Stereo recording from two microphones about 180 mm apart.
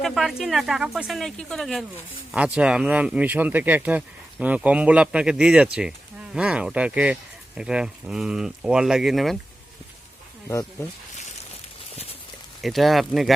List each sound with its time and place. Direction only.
0.0 s speech: centre (ahead or behind)
10.5 s speech: 15° left (ahead or behind)
11.9 s a sound: 35° left (ahead or behind)
12.6 s speech: centre (ahead or behind)